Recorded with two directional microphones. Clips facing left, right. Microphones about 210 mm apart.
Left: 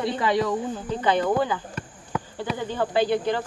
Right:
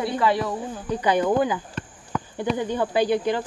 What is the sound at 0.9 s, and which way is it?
Speech, 10° right (ahead or behind).